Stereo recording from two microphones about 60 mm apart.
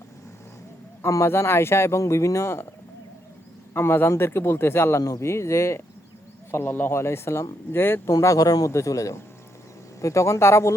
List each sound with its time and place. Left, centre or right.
1.0 s speech: left
3.8 s a man's voice: left
4.9 s speech: left
6.5 s a man's voice: left
6.9 s a man's voice: left
8.2 s a man's voice: left